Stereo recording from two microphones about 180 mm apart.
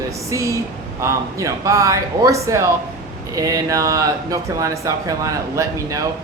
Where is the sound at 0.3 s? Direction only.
15° right (ahead or behind).